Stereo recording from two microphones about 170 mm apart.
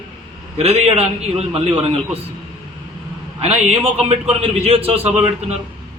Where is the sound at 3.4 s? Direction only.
35° right (ahead or behind).